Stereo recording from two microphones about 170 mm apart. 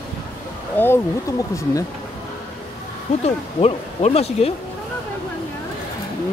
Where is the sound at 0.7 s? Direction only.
15° left (ahead or behind).